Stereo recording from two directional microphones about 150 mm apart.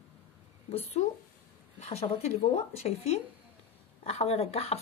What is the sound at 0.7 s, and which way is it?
A woman's voice, 40° left (ahead or behind).